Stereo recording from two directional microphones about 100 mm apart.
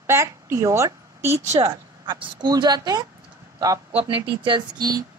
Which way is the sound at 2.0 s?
50° right (ahead or behind).